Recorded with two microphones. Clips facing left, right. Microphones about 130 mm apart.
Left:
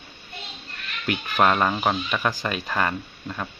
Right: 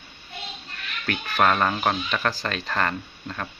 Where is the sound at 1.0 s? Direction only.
10° left (ahead or behind).